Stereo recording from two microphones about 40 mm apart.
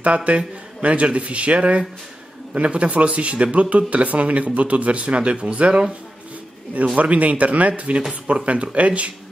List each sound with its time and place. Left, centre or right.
0.0 s speech: right
7.0 s speech: right